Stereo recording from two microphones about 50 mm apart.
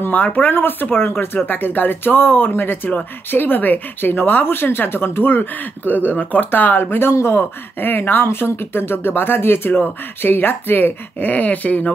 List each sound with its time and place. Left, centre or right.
0.1 s speech: left
6.8 s speech: left
7.8 s speech: left
8.3 s speech: left